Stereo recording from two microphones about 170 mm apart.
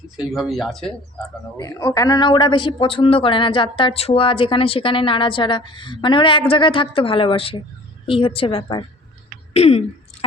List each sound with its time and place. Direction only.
0.2 s speech: centre (ahead or behind)
1.5 s a woman's voice: 20° left (ahead or behind)
9.5 s throat clearing: 35° left (ahead or behind)